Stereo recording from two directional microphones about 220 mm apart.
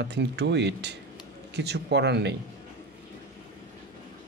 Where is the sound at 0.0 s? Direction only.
50° right (ahead or behind).